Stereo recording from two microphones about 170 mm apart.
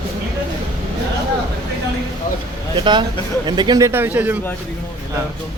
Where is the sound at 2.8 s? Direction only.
25° right (ahead or behind); by 4.3 s 10° right (ahead or behind).